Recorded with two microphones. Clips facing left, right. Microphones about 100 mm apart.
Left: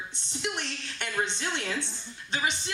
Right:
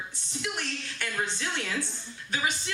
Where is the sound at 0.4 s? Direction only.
25° left (ahead or behind).